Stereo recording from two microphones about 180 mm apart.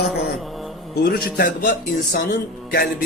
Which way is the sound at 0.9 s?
60° left (ahead or behind).